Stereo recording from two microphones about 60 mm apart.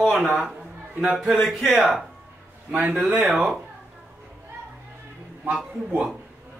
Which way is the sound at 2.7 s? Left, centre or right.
Right.